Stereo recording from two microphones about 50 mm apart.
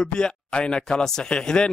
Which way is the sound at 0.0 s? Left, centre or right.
Centre.